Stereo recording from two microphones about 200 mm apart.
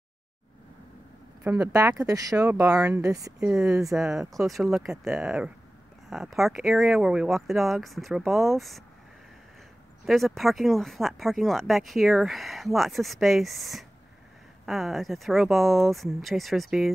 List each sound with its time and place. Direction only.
1.4 s speech: 15° right (ahead or behind)
3.3 s speech: 5° right (ahead or behind)
10.0 s speech: centre (ahead or behind)